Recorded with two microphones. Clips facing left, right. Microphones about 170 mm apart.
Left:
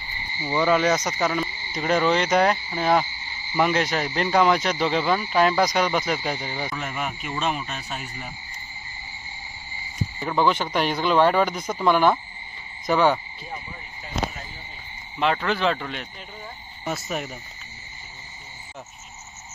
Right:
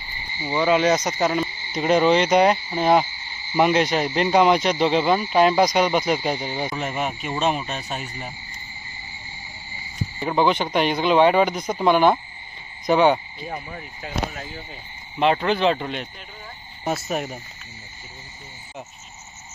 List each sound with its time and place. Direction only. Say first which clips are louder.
0.4 s speech: right 1 dB; 20° right (ahead or behind)
10.2 s speech: right 2 dB; 20° right (ahead or behind)
15.1 s speech: right 4 dB; 25° right (ahead or behind)
17.1 s cricket: right 3 dB; 40° right (ahead or behind)